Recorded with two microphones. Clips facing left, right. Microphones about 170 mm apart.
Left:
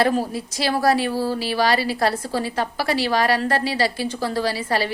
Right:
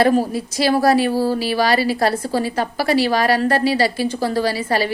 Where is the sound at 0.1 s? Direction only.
5° right (ahead or behind).